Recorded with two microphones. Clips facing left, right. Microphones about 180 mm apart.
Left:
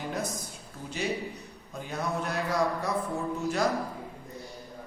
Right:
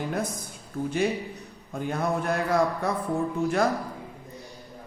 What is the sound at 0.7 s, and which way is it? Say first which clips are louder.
Speech: right 6 dB; 50° right (ahead or behind).